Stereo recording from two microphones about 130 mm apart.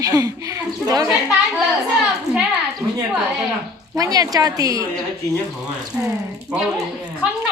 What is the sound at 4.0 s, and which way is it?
Speech, 30° right (ahead or behind).